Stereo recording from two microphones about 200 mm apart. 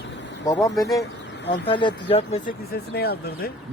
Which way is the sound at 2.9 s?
50° left (ahead or behind).